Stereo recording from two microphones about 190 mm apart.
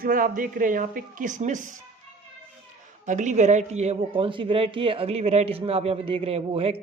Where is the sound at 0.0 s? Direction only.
45° right (ahead or behind).